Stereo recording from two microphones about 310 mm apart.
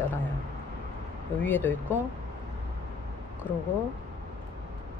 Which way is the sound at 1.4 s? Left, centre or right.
Centre.